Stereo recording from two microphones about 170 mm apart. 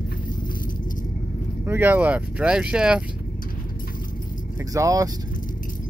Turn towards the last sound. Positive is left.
turn(degrees=-20)  # may be behind; listen again after turning